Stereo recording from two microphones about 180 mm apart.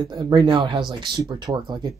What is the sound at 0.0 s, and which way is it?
Speech, 25° right (ahead or behind).